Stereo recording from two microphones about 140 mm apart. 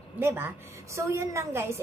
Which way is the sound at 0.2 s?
15° right (ahead or behind).